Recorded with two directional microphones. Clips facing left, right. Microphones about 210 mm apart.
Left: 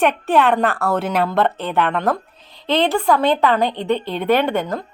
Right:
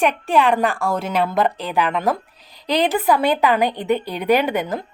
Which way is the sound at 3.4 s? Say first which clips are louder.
Even; 15° right (ahead or behind).